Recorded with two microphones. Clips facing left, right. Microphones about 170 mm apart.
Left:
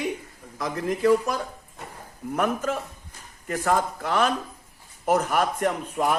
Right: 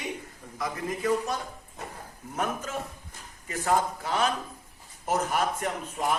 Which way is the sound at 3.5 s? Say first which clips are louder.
Left 2 dB; 50° left (ahead or behind).